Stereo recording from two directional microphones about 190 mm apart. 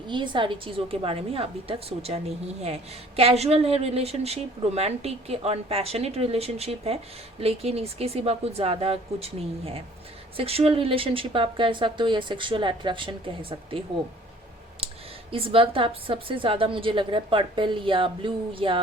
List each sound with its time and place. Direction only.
0.1 s a woman's voice: 25° right (ahead or behind)
15.3 s speech: 30° right (ahead or behind)